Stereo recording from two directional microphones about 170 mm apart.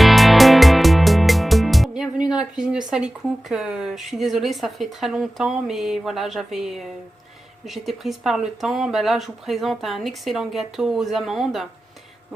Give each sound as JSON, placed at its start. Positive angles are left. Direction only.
{"t": 0.0, "sound": "music", "side_deg": 0}
{"t": 7.6, "sound": "speech", "side_deg": 0}